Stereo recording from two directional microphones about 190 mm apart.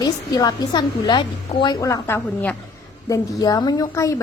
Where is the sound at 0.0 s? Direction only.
20° left (ahead or behind).